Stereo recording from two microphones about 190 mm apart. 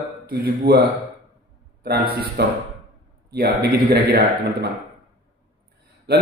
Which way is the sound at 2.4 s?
60° right (ahead or behind).